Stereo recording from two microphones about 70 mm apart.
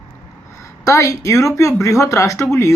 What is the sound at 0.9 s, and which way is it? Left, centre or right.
Speech, left.